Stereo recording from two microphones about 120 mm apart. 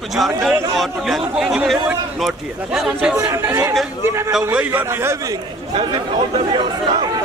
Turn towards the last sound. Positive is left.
turn(degrees=-45)  # may be behind; listen again after turning